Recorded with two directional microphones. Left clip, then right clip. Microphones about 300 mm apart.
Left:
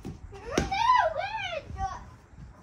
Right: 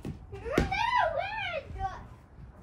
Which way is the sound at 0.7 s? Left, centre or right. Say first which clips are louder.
Left 4 dB; centre.